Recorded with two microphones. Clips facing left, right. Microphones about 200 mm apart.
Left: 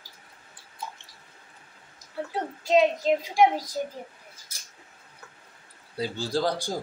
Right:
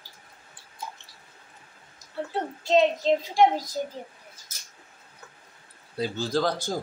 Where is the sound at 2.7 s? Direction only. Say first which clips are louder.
Even; 10° left (ahead or behind).